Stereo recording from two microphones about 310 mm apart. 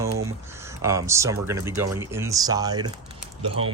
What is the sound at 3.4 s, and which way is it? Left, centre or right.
Speech, right.